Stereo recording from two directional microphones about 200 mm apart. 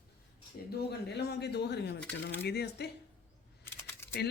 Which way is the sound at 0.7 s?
55° left (ahead or behind).